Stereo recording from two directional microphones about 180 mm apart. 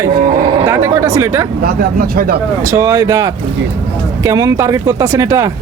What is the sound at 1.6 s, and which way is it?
Speech, 55° right (ahead or behind).